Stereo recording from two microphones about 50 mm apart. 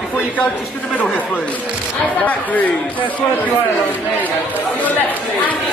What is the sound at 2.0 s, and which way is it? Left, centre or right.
Speech, left.